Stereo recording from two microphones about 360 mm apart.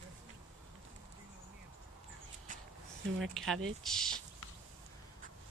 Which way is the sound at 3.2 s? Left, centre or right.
Centre.